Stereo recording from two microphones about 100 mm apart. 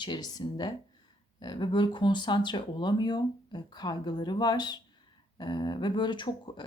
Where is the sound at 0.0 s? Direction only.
45° left (ahead or behind).